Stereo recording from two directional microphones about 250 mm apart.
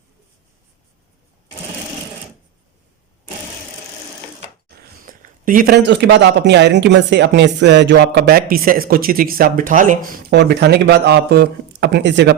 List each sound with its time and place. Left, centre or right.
4.9 s speech: right